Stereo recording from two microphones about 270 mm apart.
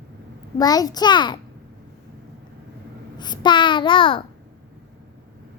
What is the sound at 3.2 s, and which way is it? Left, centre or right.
Child singing, centre.